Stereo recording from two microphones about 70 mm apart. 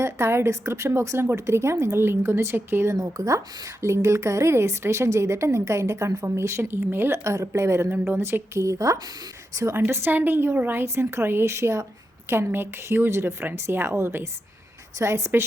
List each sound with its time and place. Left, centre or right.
0.0 s a woman's voice: right
2.9 s a woman's voice: right
9.8 s a woman's voice: right